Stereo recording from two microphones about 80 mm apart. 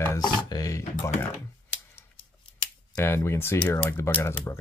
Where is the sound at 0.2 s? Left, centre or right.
Left.